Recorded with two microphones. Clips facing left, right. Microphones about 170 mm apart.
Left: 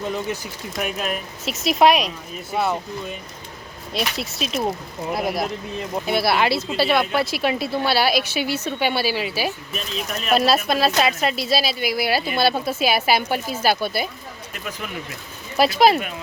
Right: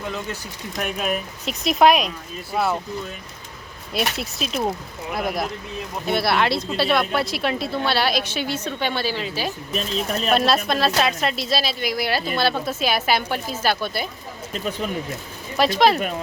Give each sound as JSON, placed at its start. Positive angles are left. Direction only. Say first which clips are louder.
{"t": 0.0, "sound": "speech", "louder": "left 4 dB", "side_deg": 15}
{"t": 0.8, "sound": "speech", "louder": "right 1 dB", "side_deg": 0}
{"t": 3.9, "sound": "speech", "louder": "right 1 dB", "side_deg": 0}
{"t": 6.1, "sound": "speech", "louder": "even", "side_deg": 0}
{"t": 9.7, "sound": "speech", "louder": "right 4 dB", "side_deg": -35}
{"t": 10.2, "sound": "speech", "louder": "left 2 dB", "side_deg": 5}
{"t": 14.5, "sound": "speech", "louder": "right 7 dB", "side_deg": -30}
{"t": 15.5, "sound": "speech", "louder": "left 1 dB", "side_deg": 10}